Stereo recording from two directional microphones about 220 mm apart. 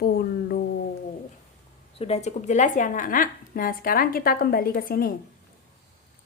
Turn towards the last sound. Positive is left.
turn(degrees=40)  # may be behind; listen again after turning